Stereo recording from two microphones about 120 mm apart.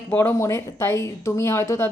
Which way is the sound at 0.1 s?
20° left (ahead or behind).